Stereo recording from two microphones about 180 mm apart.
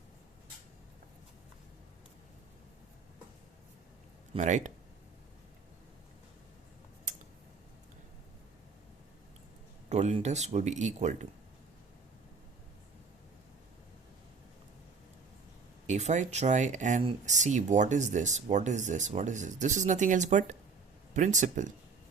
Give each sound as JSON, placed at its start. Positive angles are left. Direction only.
{"t": 4.4, "sound": "speech", "side_deg": -40}
{"t": 9.9, "sound": "speech", "side_deg": -35}
{"t": 15.9, "sound": "speech", "side_deg": -40}